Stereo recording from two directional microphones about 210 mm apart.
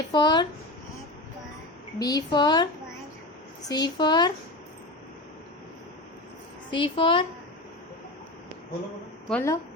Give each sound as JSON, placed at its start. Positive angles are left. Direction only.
{"t": 0.1, "sound": "speech", "side_deg": 20}
{"t": 2.0, "sound": "speech", "side_deg": 20}
{"t": 3.7, "sound": "speech", "side_deg": 20}
{"t": 6.7, "sound": "speech", "side_deg": 25}
{"t": 9.3, "sound": "speech", "side_deg": 15}